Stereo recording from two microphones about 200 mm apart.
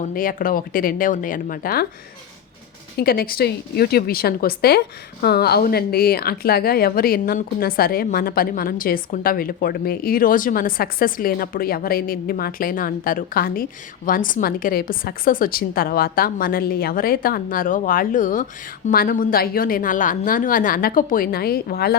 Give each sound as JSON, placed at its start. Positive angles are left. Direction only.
{"t": 0.1, "sound": "a woman's voice", "side_deg": 45}
{"t": 3.0, "sound": "a woman's voice", "side_deg": 50}